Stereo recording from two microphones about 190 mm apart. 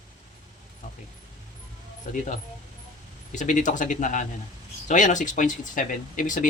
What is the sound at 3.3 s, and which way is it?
Speech, 40° left (ahead or behind).